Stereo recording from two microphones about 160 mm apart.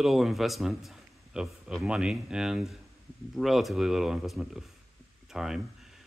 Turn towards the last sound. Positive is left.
turn(degrees=-5)  # may be behind; listen again after turning